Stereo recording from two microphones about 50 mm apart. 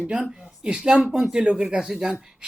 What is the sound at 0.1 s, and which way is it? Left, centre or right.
Speech, centre.